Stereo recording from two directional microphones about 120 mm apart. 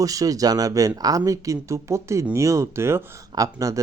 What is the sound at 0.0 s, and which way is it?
Speech, 30° right (ahead or behind).